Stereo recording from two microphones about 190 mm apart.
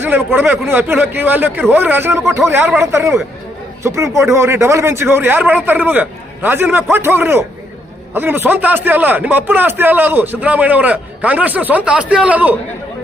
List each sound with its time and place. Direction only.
0.0 s a man's voice: 10° right (ahead or behind)